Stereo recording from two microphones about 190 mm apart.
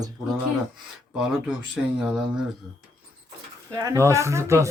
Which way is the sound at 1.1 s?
5° right (ahead or behind).